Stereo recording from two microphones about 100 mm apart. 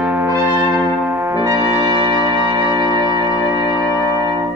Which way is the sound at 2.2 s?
40° right (ahead or behind).